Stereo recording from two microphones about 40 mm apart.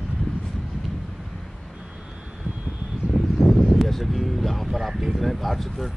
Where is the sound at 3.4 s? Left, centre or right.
Centre.